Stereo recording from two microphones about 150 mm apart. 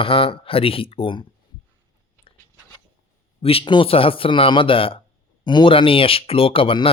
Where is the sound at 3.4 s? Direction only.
40° left (ahead or behind).